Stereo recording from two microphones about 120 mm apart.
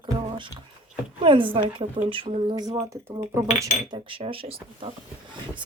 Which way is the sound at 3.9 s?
45° right (ahead or behind).